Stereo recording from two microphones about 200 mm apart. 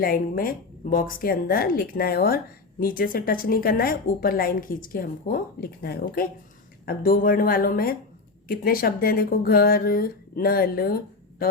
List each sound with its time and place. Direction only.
0.0 s a woman's voice: 45° left (ahead or behind)